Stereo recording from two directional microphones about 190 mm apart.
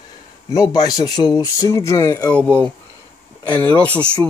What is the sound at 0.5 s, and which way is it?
Speech, 20° left (ahead or behind).